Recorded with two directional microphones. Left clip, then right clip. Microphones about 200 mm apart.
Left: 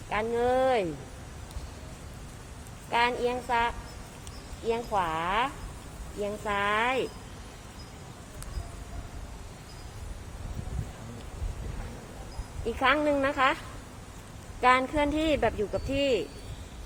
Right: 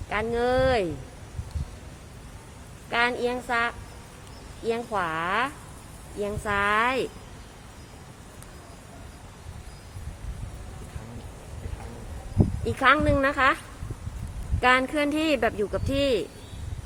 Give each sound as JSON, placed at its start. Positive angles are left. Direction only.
{"t": 0.1, "sound": "speech", "side_deg": -50}
{"t": 2.9, "sound": "speech", "side_deg": -55}
{"t": 12.6, "sound": "speech", "side_deg": -50}
{"t": 14.6, "sound": "speech", "side_deg": -50}